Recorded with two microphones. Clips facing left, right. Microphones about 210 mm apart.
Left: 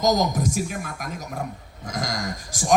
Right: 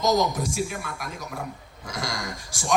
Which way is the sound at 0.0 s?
45° left (ahead or behind).